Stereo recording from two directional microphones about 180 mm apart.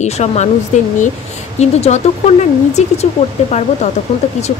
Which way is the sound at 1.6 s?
40° left (ahead or behind).